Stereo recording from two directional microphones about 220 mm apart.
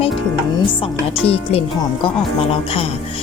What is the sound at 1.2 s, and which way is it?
Speech, 25° left (ahead or behind).